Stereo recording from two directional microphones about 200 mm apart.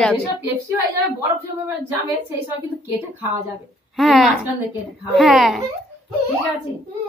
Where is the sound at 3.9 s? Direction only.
Centre (ahead or behind).